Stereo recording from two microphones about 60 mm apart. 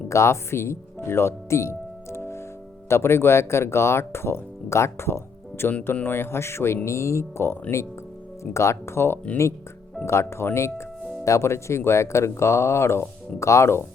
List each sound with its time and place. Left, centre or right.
0.1 s speech: left